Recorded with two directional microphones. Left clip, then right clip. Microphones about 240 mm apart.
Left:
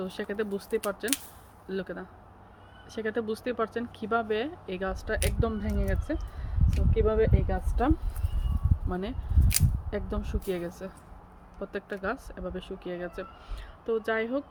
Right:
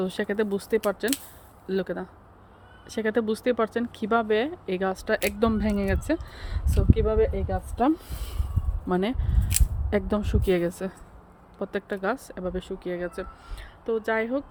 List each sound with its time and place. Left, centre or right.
0.0 s speech: right
8.9 s speech: right
9.5 s single-lens reflex camera: centre
9.9 s speech: right; by 14.4 s centre